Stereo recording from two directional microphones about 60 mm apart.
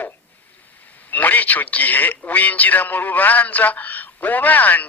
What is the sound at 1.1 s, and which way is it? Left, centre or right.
A man's voice, left.